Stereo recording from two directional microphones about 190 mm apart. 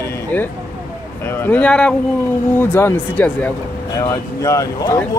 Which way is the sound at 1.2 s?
10° left (ahead or behind).